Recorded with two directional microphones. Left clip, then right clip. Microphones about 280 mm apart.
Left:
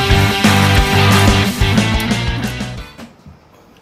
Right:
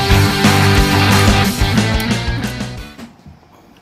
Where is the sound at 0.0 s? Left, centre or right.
Centre.